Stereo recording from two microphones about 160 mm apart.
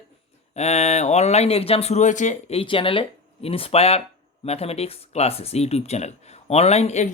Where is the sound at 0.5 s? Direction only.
45° left (ahead or behind).